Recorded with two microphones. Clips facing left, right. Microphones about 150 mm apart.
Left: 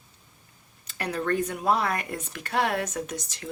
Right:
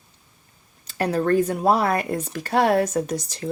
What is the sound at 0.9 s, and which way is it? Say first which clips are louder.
Speech: right 7 dB; 40° right (ahead or behind).